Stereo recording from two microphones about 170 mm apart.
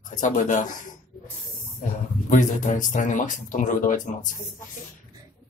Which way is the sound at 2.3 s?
50° left (ahead or behind).